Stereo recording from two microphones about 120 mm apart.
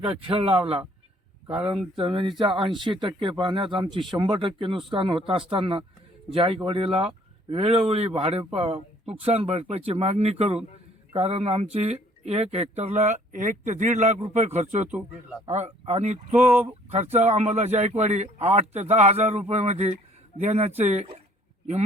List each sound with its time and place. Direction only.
0.1 s a man's voice: 45° right (ahead or behind); by 14.8 s 70° right (ahead or behind)
14.8 s speech: 15° right (ahead or behind)
15.4 s a man's voice: 65° right (ahead or behind)
16.4 s speech: 20° right (ahead or behind)
17.2 s a man's voice: 65° right (ahead or behind)